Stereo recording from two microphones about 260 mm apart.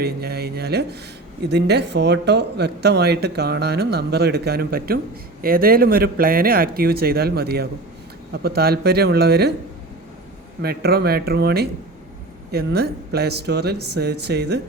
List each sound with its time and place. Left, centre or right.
0.0 s speech: right
10.6 s speech: right